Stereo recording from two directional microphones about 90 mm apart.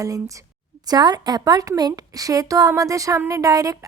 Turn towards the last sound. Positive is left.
turn(degrees=-40)  # may be behind; listen again after turning